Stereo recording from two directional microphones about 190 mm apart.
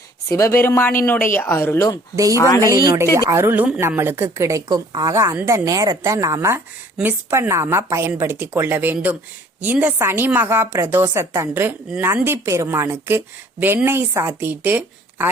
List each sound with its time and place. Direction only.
0.3 s speech: 15° left (ahead or behind)
2.6 s a woman's voice: 20° right (ahead or behind)